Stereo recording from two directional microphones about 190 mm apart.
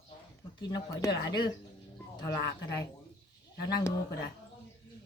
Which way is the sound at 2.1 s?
20° left (ahead or behind).